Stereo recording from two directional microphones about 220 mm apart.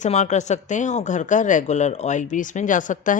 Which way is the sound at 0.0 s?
35° left (ahead or behind).